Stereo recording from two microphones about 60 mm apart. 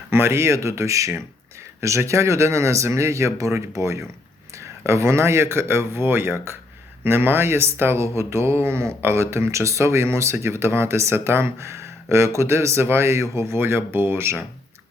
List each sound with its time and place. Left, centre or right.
0.1 s speech: right